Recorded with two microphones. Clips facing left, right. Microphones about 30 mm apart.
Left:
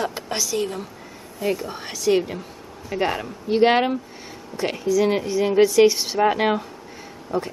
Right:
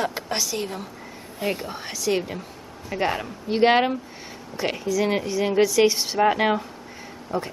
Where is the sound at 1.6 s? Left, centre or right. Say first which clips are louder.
Left 4 dB; centre.